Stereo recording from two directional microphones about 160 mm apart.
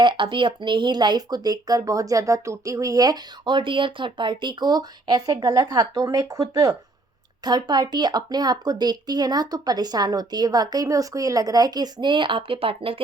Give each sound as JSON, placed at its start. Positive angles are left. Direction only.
{"t": 0.0, "sound": "speech", "side_deg": -30}